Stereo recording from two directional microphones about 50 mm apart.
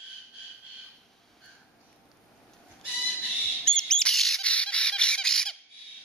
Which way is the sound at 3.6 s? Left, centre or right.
Centre.